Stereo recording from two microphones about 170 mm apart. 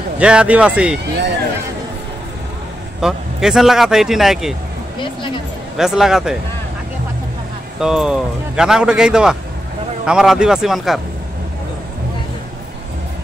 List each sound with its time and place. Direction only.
0.2 s speech: 5° right (ahead or behind)
3.0 s a man's voice: 5° right (ahead or behind)
5.0 s speech: 30° left (ahead or behind)
5.8 s a man's voice: 5° right (ahead or behind)
7.8 s a man's voice: 5° right (ahead or behind)